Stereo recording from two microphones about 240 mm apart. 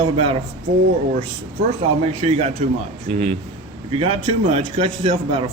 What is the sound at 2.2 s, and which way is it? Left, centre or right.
Speech, right.